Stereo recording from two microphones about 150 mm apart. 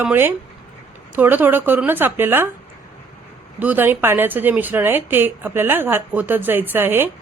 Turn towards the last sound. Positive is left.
turn(degrees=-15)  # may be behind; listen again after turning